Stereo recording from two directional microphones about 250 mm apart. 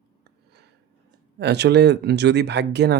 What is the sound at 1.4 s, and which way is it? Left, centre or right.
Speech, right.